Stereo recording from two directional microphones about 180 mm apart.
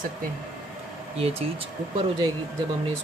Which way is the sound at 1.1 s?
35° right (ahead or behind).